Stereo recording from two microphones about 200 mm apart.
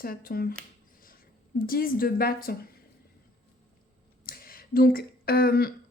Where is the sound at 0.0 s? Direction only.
45° left (ahead or behind).